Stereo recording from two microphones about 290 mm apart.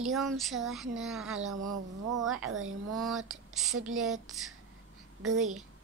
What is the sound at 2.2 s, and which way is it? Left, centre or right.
Speech, centre.